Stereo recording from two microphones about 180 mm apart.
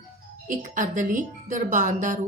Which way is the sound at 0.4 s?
45° right (ahead or behind).